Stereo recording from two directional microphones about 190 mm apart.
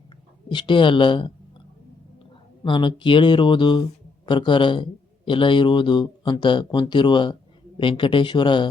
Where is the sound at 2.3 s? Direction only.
25° left (ahead or behind).